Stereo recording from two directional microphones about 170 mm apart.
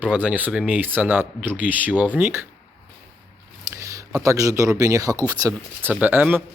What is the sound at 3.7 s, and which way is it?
Speech, 15° right (ahead or behind).